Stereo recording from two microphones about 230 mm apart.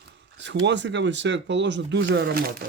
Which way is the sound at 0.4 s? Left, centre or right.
Right.